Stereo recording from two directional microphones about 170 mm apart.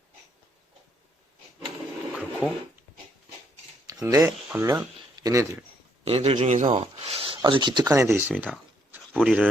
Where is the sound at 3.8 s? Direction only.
20° right (ahead or behind).